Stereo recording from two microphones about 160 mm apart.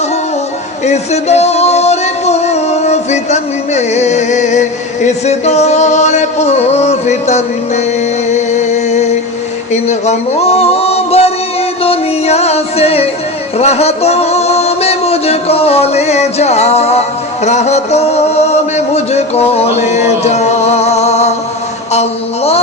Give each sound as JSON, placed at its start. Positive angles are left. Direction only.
{"t": 0.9, "sound": "music", "side_deg": 45}
{"t": 9.7, "sound": "a sound", "side_deg": 45}
{"t": 11.8, "sound": "music", "side_deg": 40}